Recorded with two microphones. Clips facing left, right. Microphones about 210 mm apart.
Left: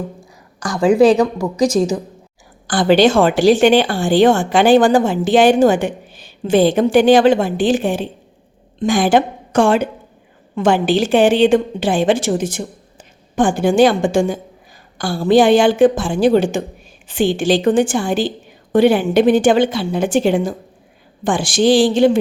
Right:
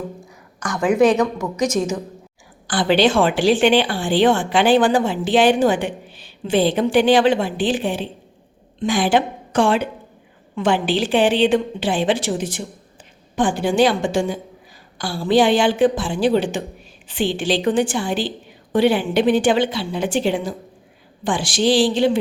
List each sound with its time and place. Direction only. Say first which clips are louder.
0.6 s a woman's voice: left 4 dB; 30° left (ahead or behind)
2.6 s a woman's voice: left 4 dB; 45° left (ahead or behind)